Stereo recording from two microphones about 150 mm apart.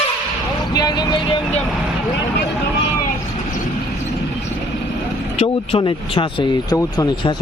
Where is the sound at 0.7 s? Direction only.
25° left (ahead or behind).